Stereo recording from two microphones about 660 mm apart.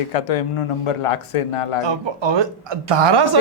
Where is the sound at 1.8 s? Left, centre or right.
Right.